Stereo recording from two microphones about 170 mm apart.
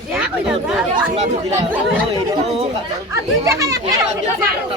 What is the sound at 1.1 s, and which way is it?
Speech, 40° right (ahead or behind).